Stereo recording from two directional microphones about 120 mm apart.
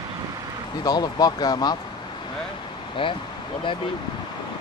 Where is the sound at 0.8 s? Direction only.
35° left (ahead or behind).